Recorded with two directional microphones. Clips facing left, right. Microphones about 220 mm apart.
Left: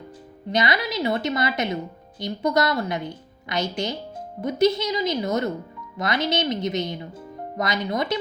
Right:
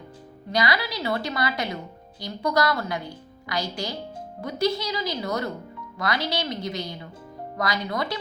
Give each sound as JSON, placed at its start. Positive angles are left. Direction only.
{"t": 0.5, "sound": "a woman's voice", "side_deg": 20}